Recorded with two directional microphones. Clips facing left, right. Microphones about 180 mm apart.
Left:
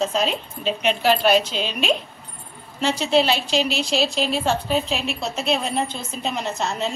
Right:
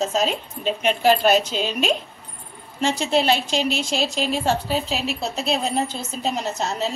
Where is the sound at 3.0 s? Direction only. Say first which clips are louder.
Left 1 dB; 50° right (ahead or behind).